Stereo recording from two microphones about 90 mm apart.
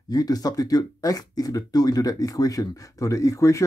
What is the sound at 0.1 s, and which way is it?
Speech, 45° left (ahead or behind).